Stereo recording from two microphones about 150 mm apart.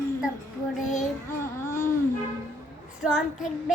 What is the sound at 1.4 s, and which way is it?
Speech, 20° left (ahead or behind).